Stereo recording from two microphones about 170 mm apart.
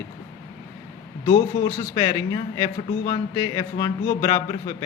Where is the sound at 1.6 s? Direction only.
25° left (ahead or behind).